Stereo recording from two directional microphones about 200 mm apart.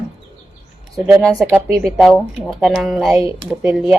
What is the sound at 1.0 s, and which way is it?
Speech, 5° right (ahead or behind).